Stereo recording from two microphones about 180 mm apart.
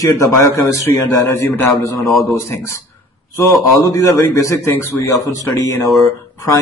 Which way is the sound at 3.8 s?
20° left (ahead or behind).